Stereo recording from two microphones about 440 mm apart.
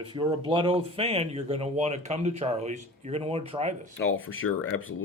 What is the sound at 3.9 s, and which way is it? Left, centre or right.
Speech, left.